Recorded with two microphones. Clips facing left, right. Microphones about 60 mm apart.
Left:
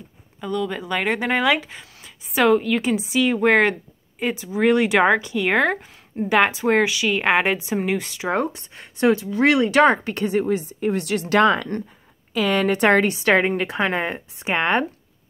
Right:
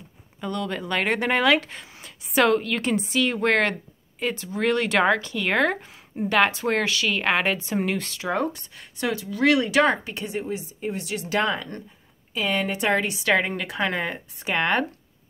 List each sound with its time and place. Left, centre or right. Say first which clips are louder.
0.4 s a woman's voice: left 3 dB; centre
8.3 s speech: left 3 dB; left
12.4 s speech: left 6 dB; left
13.1 s a woman's voice: left 4 dB; left